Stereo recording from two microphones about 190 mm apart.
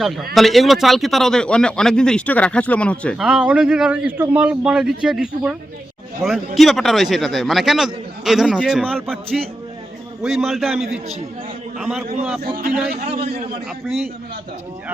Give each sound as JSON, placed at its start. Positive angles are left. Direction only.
{"t": 0.0, "sound": "a man's voice", "side_deg": 0}
{"t": 10.2, "sound": "a man's voice", "side_deg": 0}
{"t": 13.1, "sound": "a man's voice", "side_deg": -35}